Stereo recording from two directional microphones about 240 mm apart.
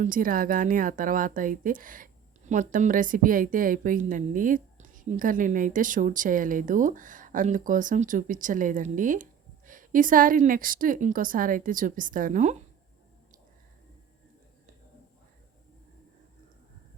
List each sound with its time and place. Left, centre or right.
0.0 s a woman's voice: right